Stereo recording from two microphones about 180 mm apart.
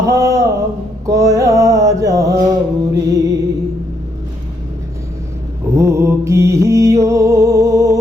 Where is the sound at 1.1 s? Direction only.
20° right (ahead or behind).